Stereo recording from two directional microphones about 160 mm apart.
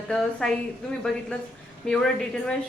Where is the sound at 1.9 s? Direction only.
5° left (ahead or behind).